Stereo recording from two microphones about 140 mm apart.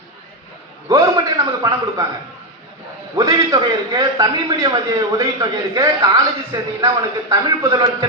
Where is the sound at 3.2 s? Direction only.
25° right (ahead or behind).